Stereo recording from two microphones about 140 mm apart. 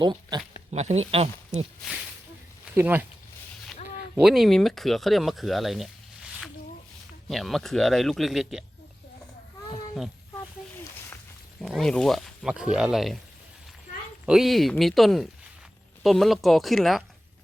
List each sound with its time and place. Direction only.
0.0 s speech: 30° right (ahead or behind)
0.7 s speech: 50° right (ahead or behind)
1.8 s speech: centre (ahead or behind)
2.7 s speech: 15° right (ahead or behind)
4.1 s speech: 5° right (ahead or behind)
7.3 s speech: centre (ahead or behind)
11.6 s speech: 5° left (ahead or behind)
14.3 s speech: centre (ahead or behind)